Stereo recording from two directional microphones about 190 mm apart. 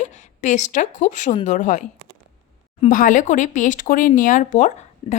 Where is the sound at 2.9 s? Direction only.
45° left (ahead or behind).